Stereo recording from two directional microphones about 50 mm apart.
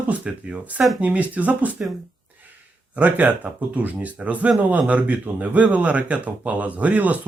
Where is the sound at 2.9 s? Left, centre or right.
Right.